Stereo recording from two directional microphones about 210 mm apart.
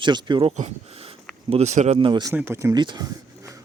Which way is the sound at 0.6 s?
30° right (ahead or behind).